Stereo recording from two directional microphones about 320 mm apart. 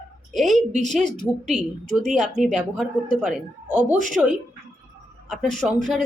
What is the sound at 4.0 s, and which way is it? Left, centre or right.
Speech, right.